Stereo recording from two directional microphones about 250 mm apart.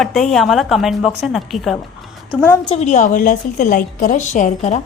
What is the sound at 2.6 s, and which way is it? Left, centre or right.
A woman's voice, left.